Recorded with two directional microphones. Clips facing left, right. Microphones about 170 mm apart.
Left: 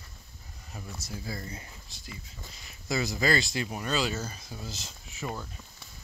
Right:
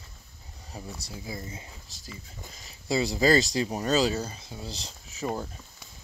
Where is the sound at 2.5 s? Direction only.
35° right (ahead or behind).